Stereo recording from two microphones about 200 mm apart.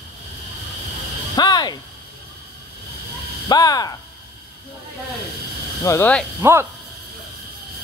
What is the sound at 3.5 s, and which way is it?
Speech, 20° left (ahead or behind).